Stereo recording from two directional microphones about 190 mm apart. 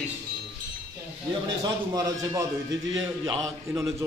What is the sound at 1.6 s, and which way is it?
Speech, 20° right (ahead or behind).